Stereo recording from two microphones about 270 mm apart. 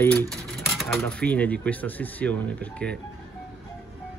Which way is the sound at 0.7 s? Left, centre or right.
Centre.